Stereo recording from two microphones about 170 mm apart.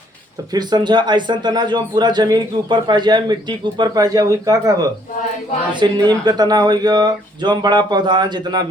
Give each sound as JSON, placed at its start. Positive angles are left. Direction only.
{"t": 0.5, "sound": "a man's voice", "side_deg": -25}